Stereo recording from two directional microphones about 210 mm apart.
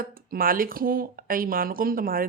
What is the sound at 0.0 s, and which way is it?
Speech, 45° right (ahead or behind).